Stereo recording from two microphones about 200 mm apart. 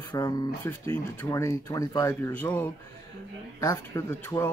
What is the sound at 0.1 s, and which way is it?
Speech, 20° left (ahead or behind).